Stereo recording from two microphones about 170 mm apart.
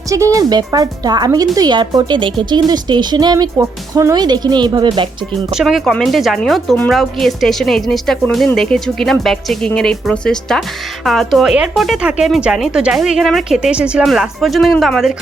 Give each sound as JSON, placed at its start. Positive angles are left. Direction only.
{"t": 0.3, "sound": "speech", "side_deg": -20}
{"t": 5.5, "sound": "speech", "side_deg": 0}